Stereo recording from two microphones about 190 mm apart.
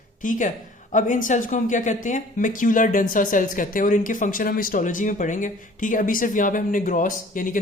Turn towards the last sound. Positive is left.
turn(degrees=45)  # may be behind; listen again after turning